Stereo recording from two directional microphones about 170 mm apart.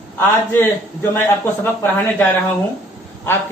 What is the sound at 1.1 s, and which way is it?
Speech, 15° left (ahead or behind).